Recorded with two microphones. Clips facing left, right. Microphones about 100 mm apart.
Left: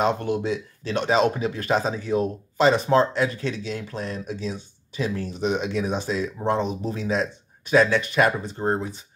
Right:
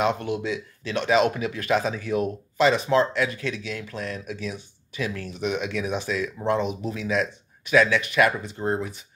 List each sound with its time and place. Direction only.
0.0 s speech: 35° left (ahead or behind)